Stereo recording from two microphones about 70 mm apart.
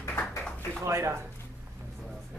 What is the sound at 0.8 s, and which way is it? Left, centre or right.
Speech, right.